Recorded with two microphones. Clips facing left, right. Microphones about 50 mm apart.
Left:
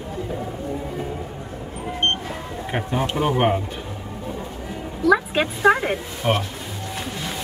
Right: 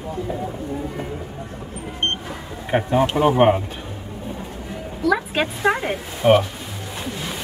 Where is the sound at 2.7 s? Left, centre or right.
Centre.